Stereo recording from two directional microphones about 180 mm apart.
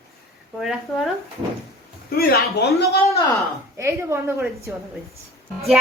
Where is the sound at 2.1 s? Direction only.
60° left (ahead or behind).